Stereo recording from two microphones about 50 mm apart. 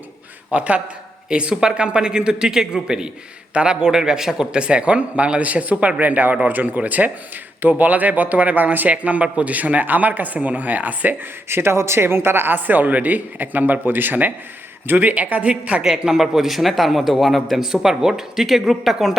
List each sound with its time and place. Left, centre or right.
0.5 s a man's voice: right
11.4 s speech: right
15.8 s a man's voice: centre